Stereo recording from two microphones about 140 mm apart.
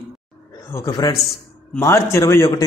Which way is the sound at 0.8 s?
30° left (ahead or behind).